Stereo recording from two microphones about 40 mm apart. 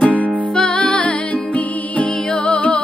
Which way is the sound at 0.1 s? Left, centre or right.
Left.